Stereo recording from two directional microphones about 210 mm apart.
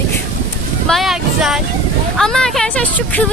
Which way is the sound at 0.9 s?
Centre (ahead or behind).